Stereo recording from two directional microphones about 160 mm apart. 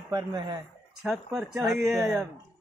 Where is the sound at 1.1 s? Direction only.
Centre (ahead or behind).